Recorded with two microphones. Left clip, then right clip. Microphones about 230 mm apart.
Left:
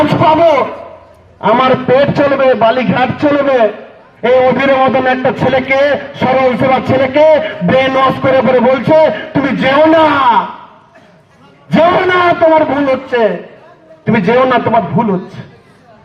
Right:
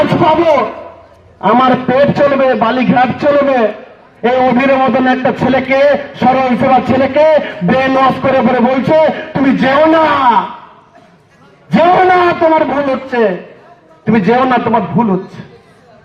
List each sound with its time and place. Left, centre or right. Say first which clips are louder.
0.1 s a sound: left 1 dB; left
1.4 s a man's voice: even; left
11.7 s a man's voice: right 1 dB; left